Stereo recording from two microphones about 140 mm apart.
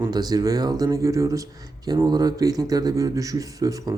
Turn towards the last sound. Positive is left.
turn(degrees=-25)  # may be behind; listen again after turning